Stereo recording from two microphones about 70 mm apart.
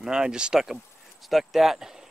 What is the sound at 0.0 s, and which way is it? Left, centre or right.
Speech, centre.